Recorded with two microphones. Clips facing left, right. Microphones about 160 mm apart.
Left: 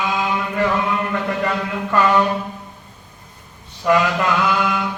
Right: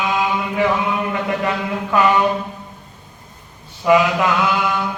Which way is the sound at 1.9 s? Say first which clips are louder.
Even; 5° right (ahead or behind).